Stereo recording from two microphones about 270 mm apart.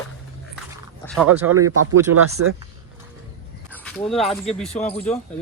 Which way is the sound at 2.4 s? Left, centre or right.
Right.